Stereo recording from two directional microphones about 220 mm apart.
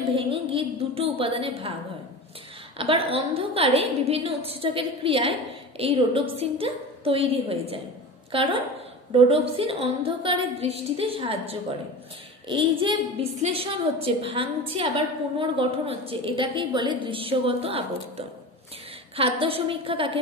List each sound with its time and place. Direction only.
0.1 s a woman's voice: 25° right (ahead or behind)
2.8 s a woman's voice: 25° right (ahead or behind)